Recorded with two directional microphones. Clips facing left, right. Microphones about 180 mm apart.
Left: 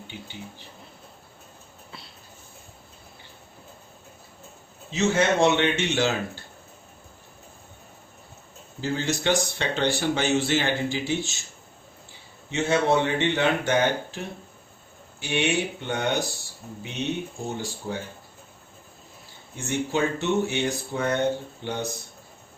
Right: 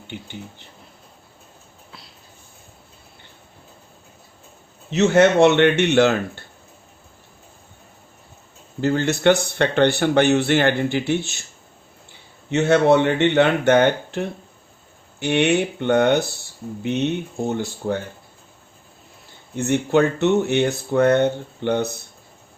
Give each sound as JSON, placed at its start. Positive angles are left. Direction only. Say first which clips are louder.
{"t": 4.9, "sound": "speech", "louder": "right 7 dB", "side_deg": -65}
{"t": 8.8, "sound": "speech", "louder": "right 8 dB", "side_deg": -60}
{"t": 12.5, "sound": "speech", "louder": "right 7 dB", "side_deg": -65}
{"t": 19.5, "sound": "speech", "louder": "right 8 dB", "side_deg": -60}